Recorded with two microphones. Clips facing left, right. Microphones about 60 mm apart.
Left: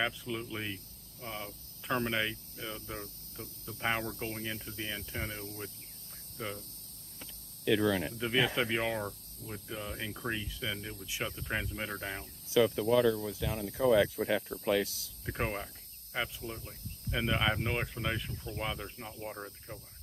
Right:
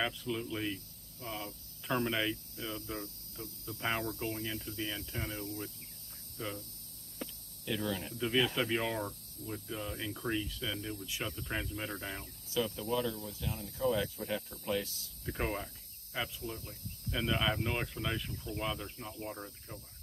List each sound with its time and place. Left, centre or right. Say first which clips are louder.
0.0 s cricket: left 1 dB; centre
7.6 s speech: left 8 dB; left
8.2 s cricket: right 3 dB; centre
12.5 s speech: left 8 dB; left
15.2 s cricket: left 1 dB; centre